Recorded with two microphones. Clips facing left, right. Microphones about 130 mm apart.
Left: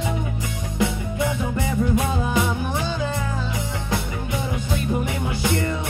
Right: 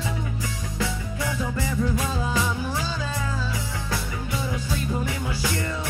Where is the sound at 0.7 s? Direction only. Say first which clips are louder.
Left 7 dB; 20° left (ahead or behind).